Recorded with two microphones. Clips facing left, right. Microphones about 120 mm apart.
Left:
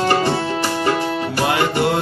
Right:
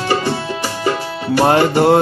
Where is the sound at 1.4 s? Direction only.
40° right (ahead or behind).